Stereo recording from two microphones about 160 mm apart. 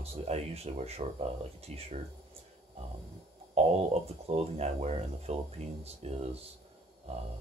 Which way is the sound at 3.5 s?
40° right (ahead or behind).